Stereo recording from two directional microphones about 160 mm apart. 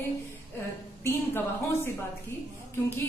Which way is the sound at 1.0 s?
15° left (ahead or behind).